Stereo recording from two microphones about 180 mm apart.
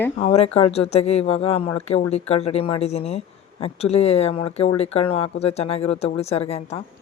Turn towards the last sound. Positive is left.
turn(degrees=35)  # may be behind; listen again after turning